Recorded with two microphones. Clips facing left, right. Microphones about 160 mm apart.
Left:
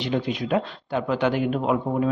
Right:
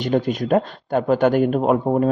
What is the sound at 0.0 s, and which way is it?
Speech, 45° right (ahead or behind).